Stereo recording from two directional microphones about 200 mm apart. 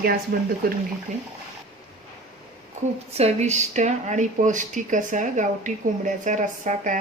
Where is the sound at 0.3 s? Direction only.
45° right (ahead or behind).